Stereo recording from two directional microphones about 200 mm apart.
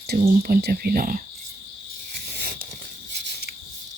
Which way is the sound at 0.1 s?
50° right (ahead or behind).